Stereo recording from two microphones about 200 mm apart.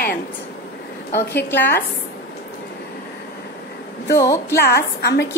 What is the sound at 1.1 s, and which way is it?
Speech, 10° left (ahead or behind).